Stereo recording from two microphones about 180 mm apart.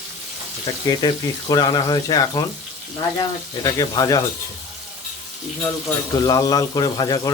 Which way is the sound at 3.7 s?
20° left (ahead or behind).